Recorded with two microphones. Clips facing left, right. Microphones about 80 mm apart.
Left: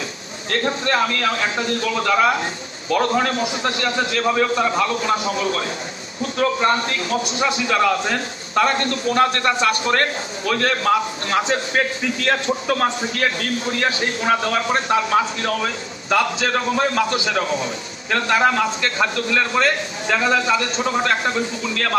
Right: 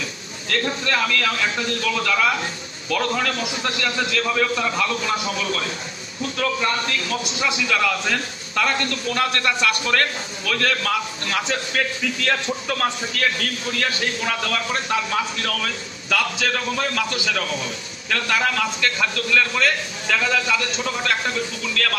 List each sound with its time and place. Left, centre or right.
0.5 s a man's voice: left